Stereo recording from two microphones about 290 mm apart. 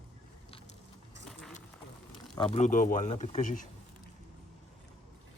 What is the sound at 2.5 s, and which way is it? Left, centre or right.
Speech, left.